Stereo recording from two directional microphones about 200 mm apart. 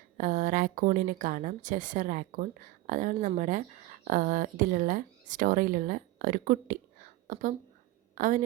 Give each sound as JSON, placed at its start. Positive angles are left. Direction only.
{"t": 0.2, "sound": "a woman's voice", "side_deg": -40}